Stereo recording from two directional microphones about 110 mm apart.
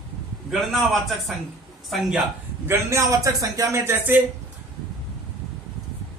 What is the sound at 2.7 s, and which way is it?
A man's voice, 30° right (ahead or behind).